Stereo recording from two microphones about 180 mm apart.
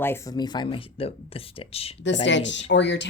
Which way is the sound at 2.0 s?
85° left.